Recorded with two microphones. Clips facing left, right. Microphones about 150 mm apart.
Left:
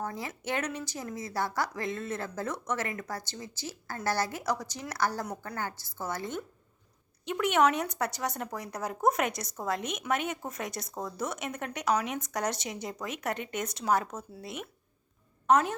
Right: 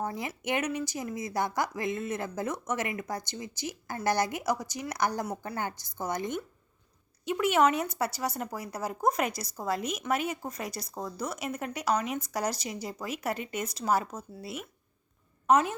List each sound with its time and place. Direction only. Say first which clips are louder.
0.0 s speech: right 2 dB; 15° right (ahead or behind)
7.3 s a woman's voice: right 1 dB; 5° right (ahead or behind)